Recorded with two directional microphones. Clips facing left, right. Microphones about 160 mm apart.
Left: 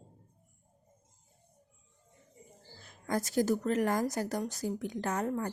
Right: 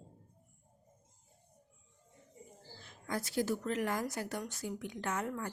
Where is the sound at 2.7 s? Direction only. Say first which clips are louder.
Left 6 dB; 40° left (ahead or behind).